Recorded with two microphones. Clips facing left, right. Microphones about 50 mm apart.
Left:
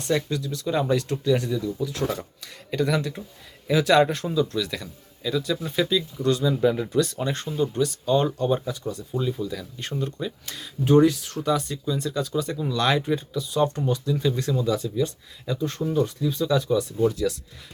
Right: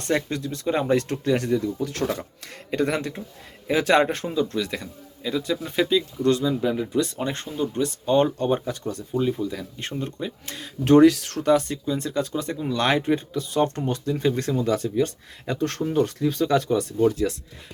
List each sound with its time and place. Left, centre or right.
0.0 s speech: right
2.4 s speech: right
6.6 s speech: centre
7.4 s speech: centre
7.7 s speech: right
10.8 s speech: right
11.4 s speech: right